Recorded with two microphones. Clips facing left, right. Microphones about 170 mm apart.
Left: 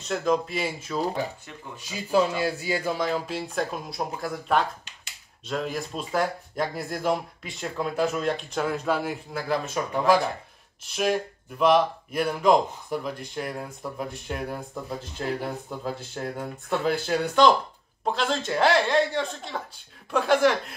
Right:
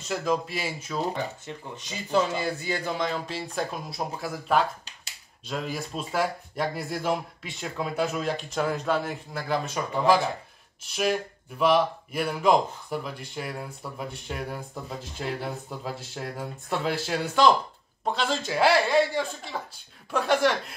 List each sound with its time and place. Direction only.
0.0 s speech: centre (ahead or behind)